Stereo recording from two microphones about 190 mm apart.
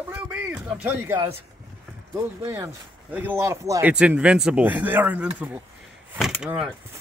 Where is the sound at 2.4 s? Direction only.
15° right (ahead or behind).